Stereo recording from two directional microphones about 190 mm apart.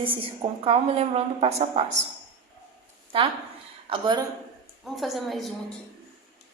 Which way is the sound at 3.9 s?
25° right (ahead or behind).